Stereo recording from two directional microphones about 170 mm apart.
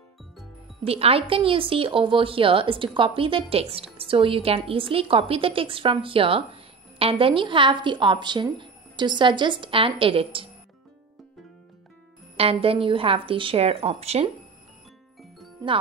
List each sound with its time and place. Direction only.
0.8 s a woman's voice: 35° right (ahead or behind)
12.4 s a woman's voice: 35° right (ahead or behind)